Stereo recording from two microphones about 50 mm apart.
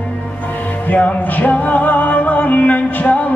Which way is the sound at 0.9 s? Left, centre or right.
Left.